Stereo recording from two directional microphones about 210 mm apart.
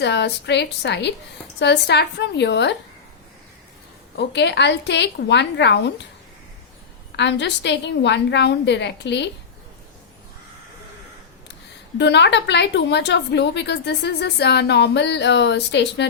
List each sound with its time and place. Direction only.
0.0 s a woman's voice: 55° left (ahead or behind)
4.2 s a woman's voice: 55° left (ahead or behind)
7.2 s a woman's voice: 55° left (ahead or behind)
11.9 s a woman's voice: 55° left (ahead or behind)